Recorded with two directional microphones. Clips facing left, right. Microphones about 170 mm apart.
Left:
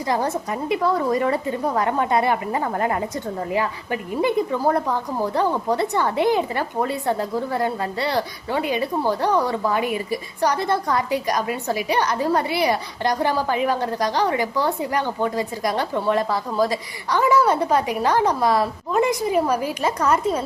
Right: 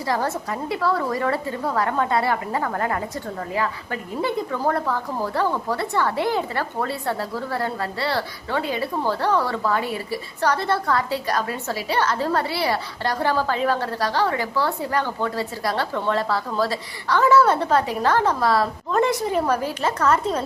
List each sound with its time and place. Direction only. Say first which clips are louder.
0.1 s a woman's voice: left 1 dB; 20° left (ahead or behind)